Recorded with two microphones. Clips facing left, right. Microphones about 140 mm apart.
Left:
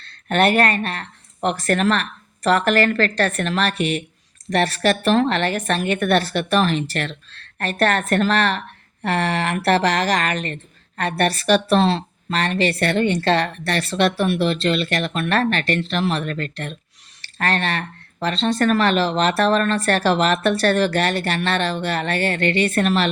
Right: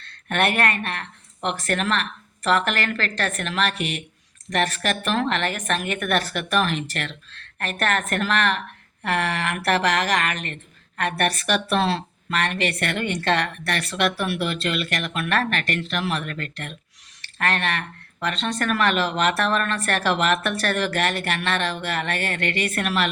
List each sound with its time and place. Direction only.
0.0 s speech: 30° left (ahead or behind)